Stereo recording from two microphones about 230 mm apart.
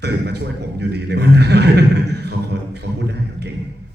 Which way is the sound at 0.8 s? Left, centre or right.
Right.